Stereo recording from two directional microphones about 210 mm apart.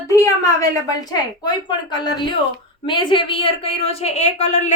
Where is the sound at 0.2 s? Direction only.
15° left (ahead or behind).